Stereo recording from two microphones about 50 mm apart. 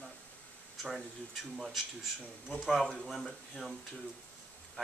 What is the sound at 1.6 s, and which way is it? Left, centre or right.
Speech, centre.